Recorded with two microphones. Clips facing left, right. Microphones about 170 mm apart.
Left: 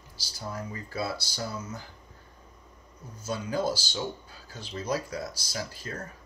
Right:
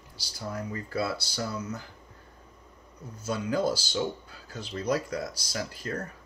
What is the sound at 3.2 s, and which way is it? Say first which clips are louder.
Speech: right 2 dB; 60° right (ahead or behind).